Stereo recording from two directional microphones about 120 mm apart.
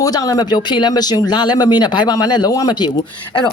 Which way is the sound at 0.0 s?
30° left (ahead or behind).